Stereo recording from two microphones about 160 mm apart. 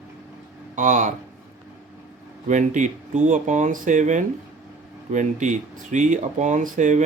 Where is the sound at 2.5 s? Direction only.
50° right (ahead or behind).